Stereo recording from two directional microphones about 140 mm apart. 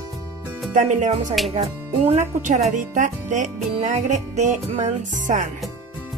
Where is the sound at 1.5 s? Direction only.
50° right (ahead or behind); by 5.4 s 65° right (ahead or behind).